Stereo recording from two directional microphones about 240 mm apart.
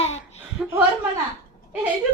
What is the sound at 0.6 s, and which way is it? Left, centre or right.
Chuckle, centre.